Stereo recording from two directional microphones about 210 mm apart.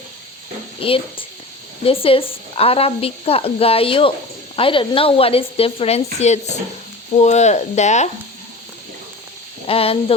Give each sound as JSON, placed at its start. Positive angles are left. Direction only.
{"t": 0.8, "sound": "speech", "side_deg": 25}
{"t": 9.6, "sound": "speech", "side_deg": 25}